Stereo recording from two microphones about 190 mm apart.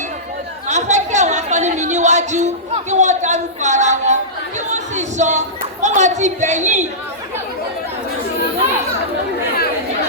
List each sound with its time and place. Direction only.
0.7 s chatter: 40° right (ahead or behind)
2.9 s a woman's voice: 40° right (ahead or behind)
4.7 s a sound: 40° right (ahead or behind)
5.8 s a woman's voice: 40° right (ahead or behind)